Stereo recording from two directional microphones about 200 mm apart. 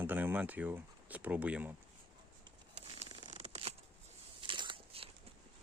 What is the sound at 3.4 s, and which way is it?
Scissors, 35° right (ahead or behind).